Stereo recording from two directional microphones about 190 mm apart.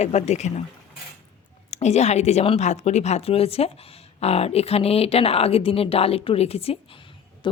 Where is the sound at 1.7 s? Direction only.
35° left (ahead or behind).